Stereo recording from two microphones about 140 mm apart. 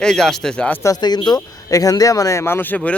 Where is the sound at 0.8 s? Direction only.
30° left (ahead or behind); by 2.9 s 10° left (ahead or behind).